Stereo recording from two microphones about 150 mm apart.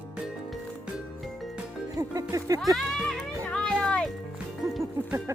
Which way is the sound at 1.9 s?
25° right (ahead or behind).